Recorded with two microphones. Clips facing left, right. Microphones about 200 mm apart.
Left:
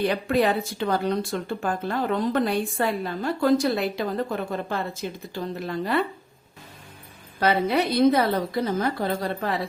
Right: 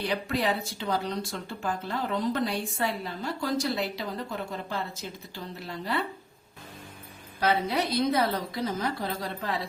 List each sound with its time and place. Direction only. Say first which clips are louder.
0.0 s speech: left 7 dB; 55° left (ahead or behind)
7.3 s speech: left 5 dB; 60° left (ahead or behind)